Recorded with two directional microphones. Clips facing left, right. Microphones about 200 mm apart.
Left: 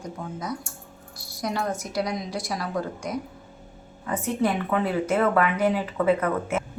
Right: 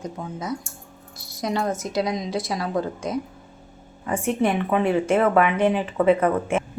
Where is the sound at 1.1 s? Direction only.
20° right (ahead or behind).